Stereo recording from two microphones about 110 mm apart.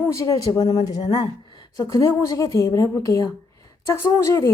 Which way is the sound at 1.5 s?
45° left (ahead or behind).